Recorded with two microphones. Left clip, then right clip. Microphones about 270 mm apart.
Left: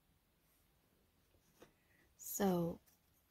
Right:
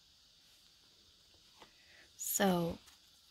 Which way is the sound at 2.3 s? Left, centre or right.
Right.